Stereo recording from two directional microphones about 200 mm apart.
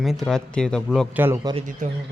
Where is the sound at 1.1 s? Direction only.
10° right (ahead or behind).